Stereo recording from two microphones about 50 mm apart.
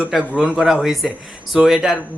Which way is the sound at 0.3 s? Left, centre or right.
Centre.